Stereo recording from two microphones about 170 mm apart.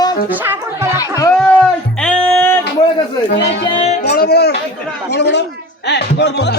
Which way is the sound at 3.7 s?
35° left (ahead or behind).